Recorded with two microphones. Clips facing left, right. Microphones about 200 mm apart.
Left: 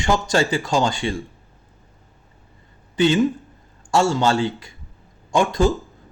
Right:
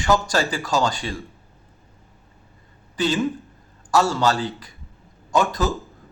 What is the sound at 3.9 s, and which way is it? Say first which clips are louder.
Speech: left 2 dB; 25° left (ahead or behind).